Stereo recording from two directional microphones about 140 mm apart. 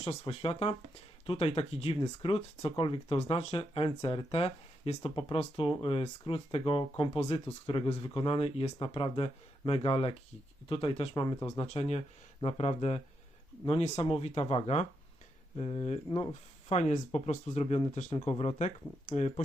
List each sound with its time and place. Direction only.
0.0 s speech: 45° left (ahead or behind)
11.1 s speech: 30° left (ahead or behind)
11.4 s speech: 45° left (ahead or behind)